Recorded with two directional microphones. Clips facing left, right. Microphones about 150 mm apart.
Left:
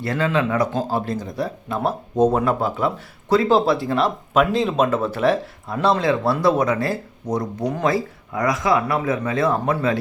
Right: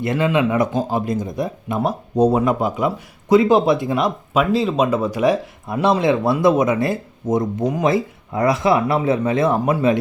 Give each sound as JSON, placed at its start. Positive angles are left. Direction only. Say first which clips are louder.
{"t": 0.0, "sound": "speech", "louder": "right 3 dB", "side_deg": -20}